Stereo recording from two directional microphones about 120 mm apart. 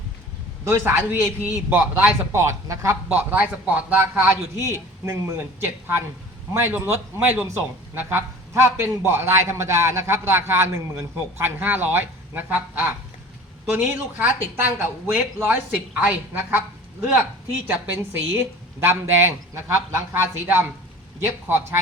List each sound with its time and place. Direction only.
0.6 s a man's voice: 20° right (ahead or behind)
7.9 s a man's voice: 20° right (ahead or behind)
17.7 s a man's voice: 15° right (ahead or behind)